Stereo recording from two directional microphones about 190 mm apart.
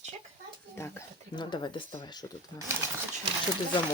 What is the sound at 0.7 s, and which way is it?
Speech, 15° left (ahead or behind).